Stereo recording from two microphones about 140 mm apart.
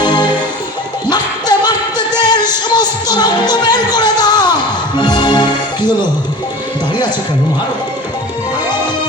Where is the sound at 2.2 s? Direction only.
30° left (ahead or behind).